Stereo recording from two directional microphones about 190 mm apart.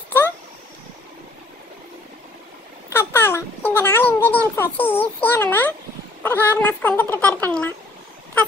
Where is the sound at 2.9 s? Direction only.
10° left (ahead or behind).